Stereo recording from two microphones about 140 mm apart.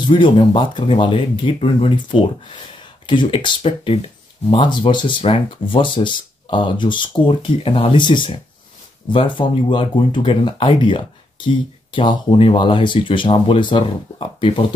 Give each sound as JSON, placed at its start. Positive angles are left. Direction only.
{"t": 0.0, "sound": "speech", "side_deg": 35}